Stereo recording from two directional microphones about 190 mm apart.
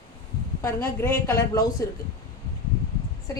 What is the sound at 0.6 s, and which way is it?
Speech, 15° left (ahead or behind).